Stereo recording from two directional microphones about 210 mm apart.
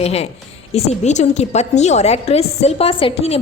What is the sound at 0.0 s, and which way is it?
A woman's voice, 30° left (ahead or behind).